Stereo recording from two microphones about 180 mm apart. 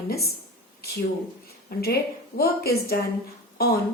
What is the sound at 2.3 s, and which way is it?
A woman's voice, 60° left (ahead or behind).